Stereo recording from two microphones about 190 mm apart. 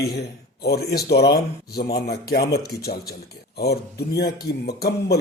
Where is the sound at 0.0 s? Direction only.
55° left (ahead or behind).